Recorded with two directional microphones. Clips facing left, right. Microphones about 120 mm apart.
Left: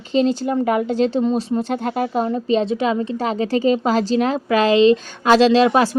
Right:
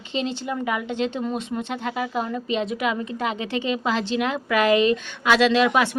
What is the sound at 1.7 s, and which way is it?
A woman's voice, 40° left (ahead or behind).